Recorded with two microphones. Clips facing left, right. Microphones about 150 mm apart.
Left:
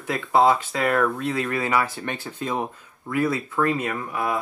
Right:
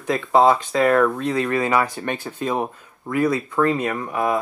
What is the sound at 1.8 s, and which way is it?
Speech, 15° right (ahead or behind).